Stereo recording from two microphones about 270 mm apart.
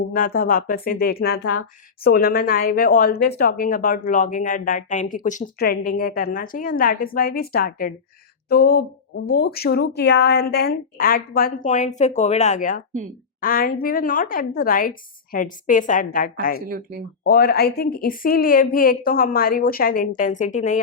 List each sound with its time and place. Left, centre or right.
0.1 s speech: left
16.6 s speech: right
17.2 s speech: left